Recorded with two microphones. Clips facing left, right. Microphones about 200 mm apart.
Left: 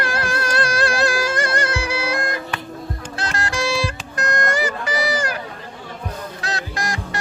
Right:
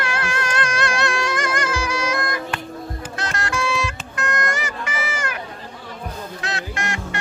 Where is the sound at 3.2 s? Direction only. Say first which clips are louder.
Left 1 dB; 35° left (ahead or behind).